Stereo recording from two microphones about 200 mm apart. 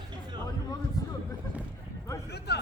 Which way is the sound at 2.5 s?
55° left (ahead or behind).